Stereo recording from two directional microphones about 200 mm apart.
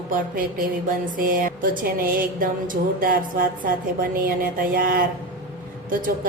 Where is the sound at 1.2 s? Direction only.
45° right (ahead or behind).